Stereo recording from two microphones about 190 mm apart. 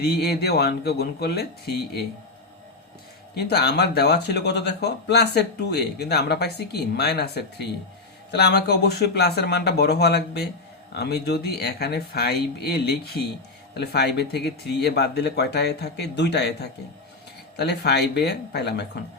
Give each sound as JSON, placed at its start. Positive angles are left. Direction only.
{"t": 0.0, "sound": "speech", "side_deg": 60}
{"t": 3.3, "sound": "speech", "side_deg": 55}